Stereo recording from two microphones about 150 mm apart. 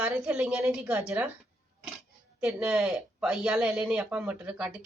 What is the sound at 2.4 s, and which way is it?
Speech, 5° right (ahead or behind).